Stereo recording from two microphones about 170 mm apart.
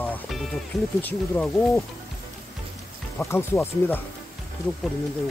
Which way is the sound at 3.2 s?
15° left (ahead or behind).